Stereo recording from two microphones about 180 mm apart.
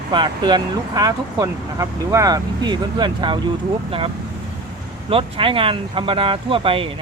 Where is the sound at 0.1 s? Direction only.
25° right (ahead or behind).